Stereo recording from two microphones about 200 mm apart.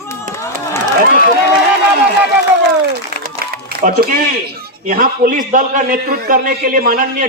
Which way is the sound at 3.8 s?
50° right (ahead or behind).